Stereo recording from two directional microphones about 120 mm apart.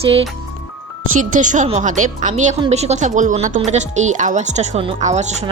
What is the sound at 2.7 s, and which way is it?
Speech, 65° right (ahead or behind).